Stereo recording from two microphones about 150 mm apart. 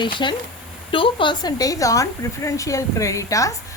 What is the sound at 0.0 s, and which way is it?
Speech, 30° left (ahead or behind).